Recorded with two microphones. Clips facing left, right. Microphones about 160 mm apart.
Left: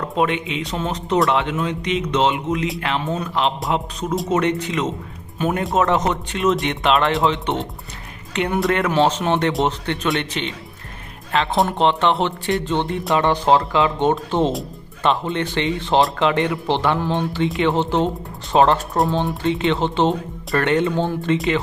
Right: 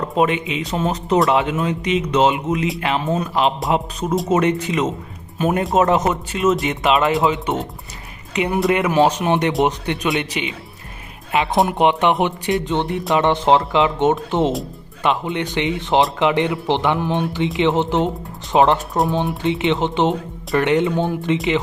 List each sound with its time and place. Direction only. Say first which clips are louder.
0.2 s speech: right 2 dB; 5° right (ahead or behind)